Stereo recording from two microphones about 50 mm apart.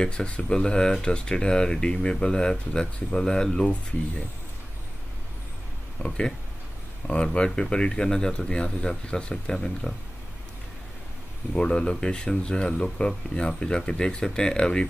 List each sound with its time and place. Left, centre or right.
0.0 s speech: left
6.0 s speech: centre
7.3 s speech: centre
11.5 s speech: centre